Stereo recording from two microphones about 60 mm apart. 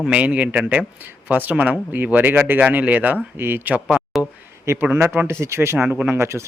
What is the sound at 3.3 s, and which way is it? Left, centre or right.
Speech, right.